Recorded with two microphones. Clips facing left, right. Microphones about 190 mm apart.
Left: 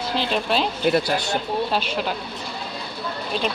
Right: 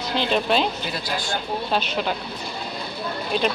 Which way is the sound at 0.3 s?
Centre (ahead or behind).